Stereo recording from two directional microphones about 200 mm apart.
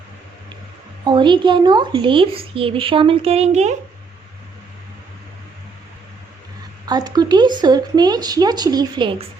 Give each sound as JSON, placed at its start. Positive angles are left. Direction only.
{"t": 1.0, "sound": "speech", "side_deg": -25}
{"t": 6.8, "sound": "speech", "side_deg": -20}